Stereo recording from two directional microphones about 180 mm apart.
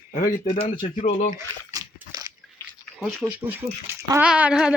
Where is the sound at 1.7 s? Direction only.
20° right (ahead or behind).